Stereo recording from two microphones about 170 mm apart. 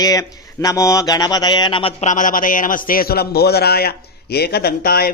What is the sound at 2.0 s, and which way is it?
Speech, 50° left (ahead or behind).